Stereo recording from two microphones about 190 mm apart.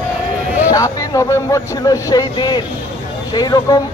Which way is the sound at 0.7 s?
20° left (ahead or behind).